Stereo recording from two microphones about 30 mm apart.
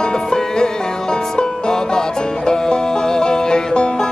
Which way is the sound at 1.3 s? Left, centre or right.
Left.